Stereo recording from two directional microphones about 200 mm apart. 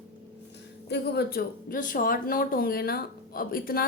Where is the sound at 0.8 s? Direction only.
55° left (ahead or behind).